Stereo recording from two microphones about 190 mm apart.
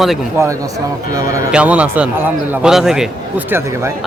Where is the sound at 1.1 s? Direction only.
15° right (ahead or behind).